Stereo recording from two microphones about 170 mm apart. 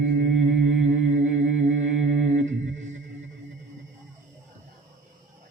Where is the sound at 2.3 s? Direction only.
45° right (ahead or behind).